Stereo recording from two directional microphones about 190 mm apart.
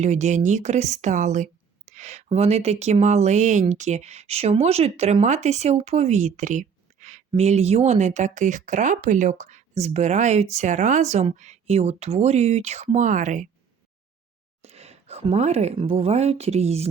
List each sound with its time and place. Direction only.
0.0 s a woman's voice: 40° right (ahead or behind)
14.6 s speech: 35° right (ahead or behind)